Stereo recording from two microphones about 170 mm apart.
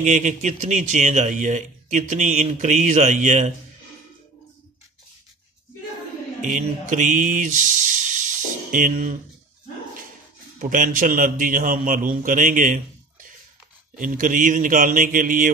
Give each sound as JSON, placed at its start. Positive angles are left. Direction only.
{"t": 0.0, "sound": "speech", "side_deg": -45}
{"t": 6.4, "sound": "speech", "side_deg": -50}
{"t": 10.6, "sound": "speech", "side_deg": -50}